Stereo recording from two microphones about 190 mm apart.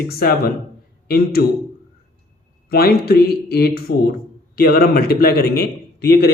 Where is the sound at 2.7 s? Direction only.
55° left (ahead or behind).